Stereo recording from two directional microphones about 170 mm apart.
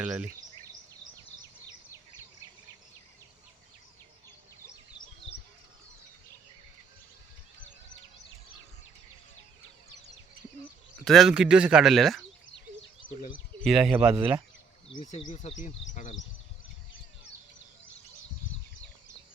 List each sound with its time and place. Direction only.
0.0 s speech: 5° right (ahead or behind)
11.0 s speech: centre (ahead or behind)
13.6 s speech: centre (ahead or behind)
14.9 s speech: 45° left (ahead or behind)